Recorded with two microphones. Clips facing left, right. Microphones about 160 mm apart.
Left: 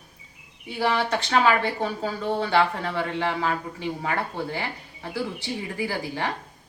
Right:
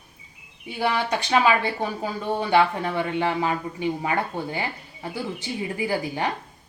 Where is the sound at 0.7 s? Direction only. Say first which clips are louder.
Even; 15° right (ahead or behind).